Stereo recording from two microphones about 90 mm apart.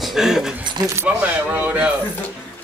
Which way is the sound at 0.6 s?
60° right (ahead or behind).